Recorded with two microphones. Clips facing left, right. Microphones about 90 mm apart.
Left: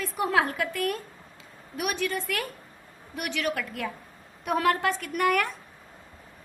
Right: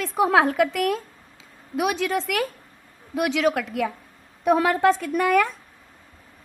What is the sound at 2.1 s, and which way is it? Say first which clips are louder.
Speech: right 7 dB; 90° right.